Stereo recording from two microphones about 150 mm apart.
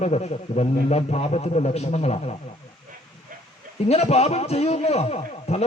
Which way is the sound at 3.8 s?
45° left (ahead or behind).